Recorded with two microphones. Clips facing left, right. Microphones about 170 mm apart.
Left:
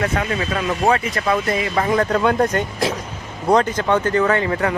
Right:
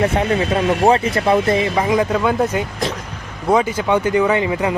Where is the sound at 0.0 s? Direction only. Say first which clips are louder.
Right 4 dB; 25° right (ahead or behind).